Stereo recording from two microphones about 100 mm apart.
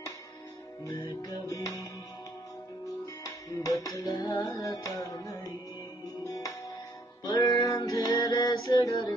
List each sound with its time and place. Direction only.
1.0 s music: 40° left (ahead or behind)
3.3 s music: 40° left (ahead or behind)